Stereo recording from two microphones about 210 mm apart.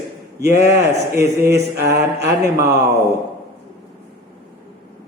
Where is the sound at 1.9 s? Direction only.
15° right (ahead or behind).